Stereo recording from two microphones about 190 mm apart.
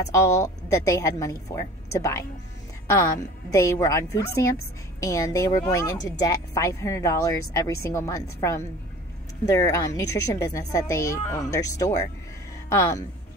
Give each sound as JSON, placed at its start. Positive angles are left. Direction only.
{"t": 0.1, "sound": "speech", "side_deg": 15}